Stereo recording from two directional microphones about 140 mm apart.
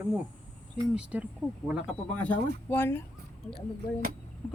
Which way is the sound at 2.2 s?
15° left (ahead or behind).